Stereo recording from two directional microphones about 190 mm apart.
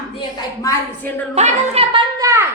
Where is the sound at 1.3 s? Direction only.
35° right (ahead or behind); by 2.4 s 15° right (ahead or behind).